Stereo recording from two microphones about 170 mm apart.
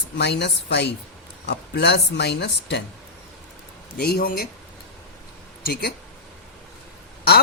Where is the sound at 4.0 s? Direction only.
60° left (ahead or behind).